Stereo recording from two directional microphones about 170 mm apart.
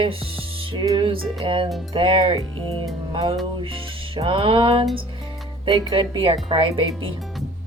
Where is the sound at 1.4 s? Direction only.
30° right (ahead or behind).